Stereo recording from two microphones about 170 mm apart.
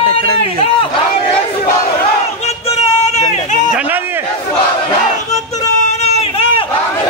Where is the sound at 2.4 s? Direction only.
40° left (ahead or behind).